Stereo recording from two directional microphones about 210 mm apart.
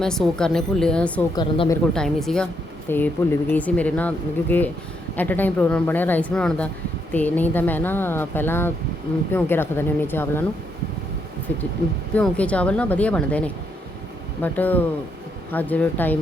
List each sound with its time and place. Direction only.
0.0 s speech: 5° left (ahead or behind)
1.4 s speech: 20° left (ahead or behind)
1.9 s speech: centre (ahead or behind)
12.1 s speech: 5° left (ahead or behind)